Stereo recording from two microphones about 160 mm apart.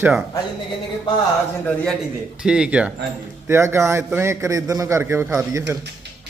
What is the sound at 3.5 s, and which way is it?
A man's voice, 15° right (ahead or behind).